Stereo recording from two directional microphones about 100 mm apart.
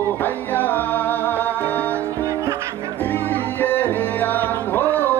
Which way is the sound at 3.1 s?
20° left (ahead or behind).